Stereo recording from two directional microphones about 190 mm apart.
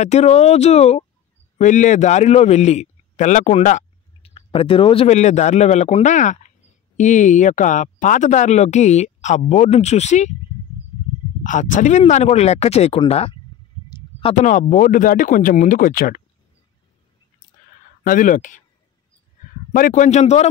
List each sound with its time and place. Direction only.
0.0 s a man's voice: 35° left (ahead or behind)
11.4 s speech: 40° left (ahead or behind)
14.3 s speech: 40° left (ahead or behind)
18.0 s speech: 45° left (ahead or behind)
19.7 s speech: 45° left (ahead or behind)